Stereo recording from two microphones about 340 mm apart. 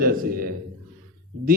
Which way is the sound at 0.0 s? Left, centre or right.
Right.